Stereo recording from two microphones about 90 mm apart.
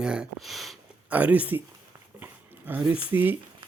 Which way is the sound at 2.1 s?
20° right (ahead or behind).